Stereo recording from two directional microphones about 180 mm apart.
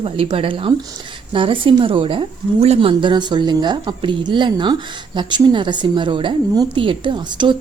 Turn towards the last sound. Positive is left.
turn(degrees=-25)  # may be behind; listen again after turning